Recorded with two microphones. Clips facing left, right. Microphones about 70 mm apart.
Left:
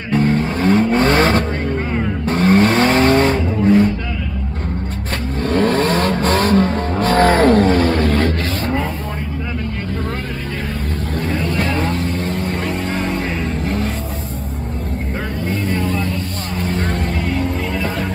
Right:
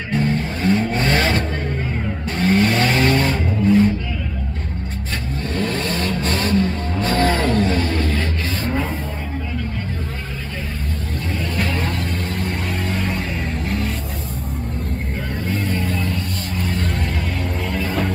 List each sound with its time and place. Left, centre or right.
0.1 s vehicle: left
5.4 s vehicle: left
11.3 s vehicle: left
15.5 s vehicle: left